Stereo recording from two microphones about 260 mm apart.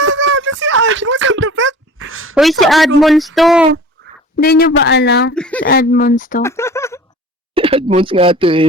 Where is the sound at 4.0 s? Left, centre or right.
Right.